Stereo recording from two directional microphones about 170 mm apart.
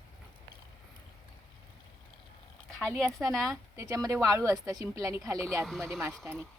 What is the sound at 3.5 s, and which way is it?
Speech, 20° right (ahead or behind).